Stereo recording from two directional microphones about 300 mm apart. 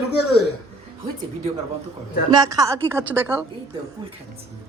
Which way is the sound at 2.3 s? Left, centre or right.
Centre.